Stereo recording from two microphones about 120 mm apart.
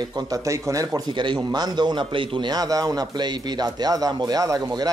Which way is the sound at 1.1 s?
40° right (ahead or behind).